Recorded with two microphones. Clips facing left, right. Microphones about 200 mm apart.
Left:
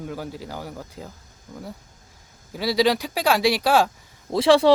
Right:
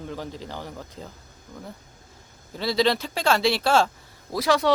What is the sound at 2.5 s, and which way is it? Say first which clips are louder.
Speech: left 2 dB; 10° left (ahead or behind).